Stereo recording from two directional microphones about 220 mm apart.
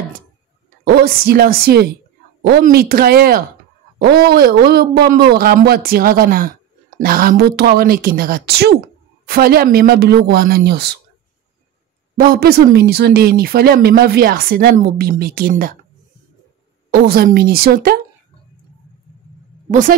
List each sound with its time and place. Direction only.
0.8 s speech: 45° right (ahead or behind)
12.2 s speech: 45° right (ahead or behind)
16.9 s speech: 45° right (ahead or behind)
19.7 s a woman's voice: 35° right (ahead or behind)